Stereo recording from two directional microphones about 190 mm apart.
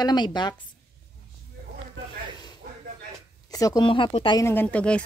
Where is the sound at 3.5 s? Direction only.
20° left (ahead or behind).